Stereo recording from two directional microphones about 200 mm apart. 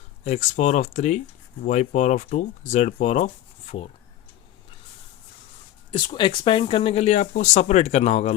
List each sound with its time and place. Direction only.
0.3 s speech: 35° left (ahead or behind)
5.9 s speech: 25° left (ahead or behind)